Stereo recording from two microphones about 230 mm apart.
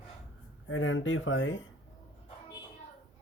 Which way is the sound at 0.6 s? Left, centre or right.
Left.